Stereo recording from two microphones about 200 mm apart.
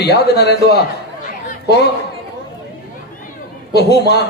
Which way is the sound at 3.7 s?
55° left (ahead or behind).